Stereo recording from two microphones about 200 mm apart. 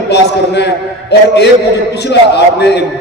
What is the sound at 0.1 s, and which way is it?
A man's voice, 60° left (ahead or behind).